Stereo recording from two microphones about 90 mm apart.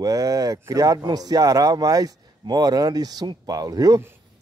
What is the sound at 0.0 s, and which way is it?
Speech, 40° right (ahead or behind).